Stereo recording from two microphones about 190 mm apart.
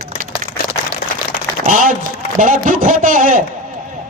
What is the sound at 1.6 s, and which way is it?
A man's voice, 45° right (ahead or behind).